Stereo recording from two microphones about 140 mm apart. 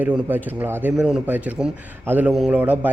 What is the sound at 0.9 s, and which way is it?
A man's voice, centre (ahead or behind).